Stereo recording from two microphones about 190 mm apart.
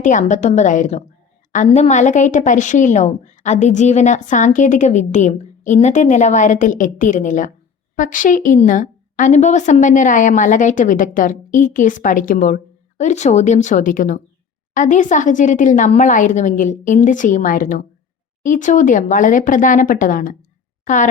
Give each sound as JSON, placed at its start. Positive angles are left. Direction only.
{"t": 0.0, "sound": "a woman's voice", "side_deg": 40}